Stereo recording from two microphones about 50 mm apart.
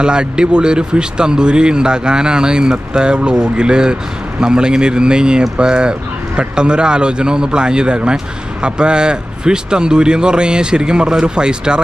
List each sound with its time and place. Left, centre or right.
0.0 s speech: centre